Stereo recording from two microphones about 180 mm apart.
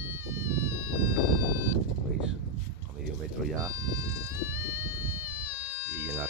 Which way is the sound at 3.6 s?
20° right (ahead or behind).